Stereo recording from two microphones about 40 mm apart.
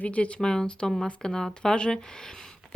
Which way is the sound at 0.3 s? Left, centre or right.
Centre.